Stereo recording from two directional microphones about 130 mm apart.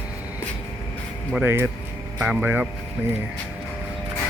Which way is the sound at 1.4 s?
15° right (ahead or behind).